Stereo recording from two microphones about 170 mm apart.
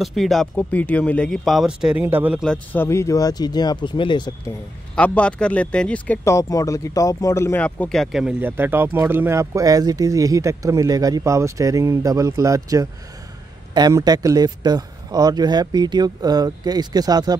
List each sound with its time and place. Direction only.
0.0 s speech: centre (ahead or behind)
2.4 s speech: 10° left (ahead or behind); by 4.3 s 25° left (ahead or behind)
4.9 s speech: 5° left (ahead or behind); by 17.4 s 25° right (ahead or behind)